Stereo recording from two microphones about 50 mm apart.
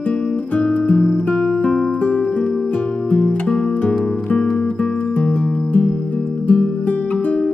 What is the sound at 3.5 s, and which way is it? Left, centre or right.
Music, centre.